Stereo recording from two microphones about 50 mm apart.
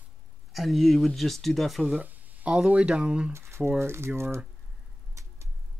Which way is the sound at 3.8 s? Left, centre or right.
Right.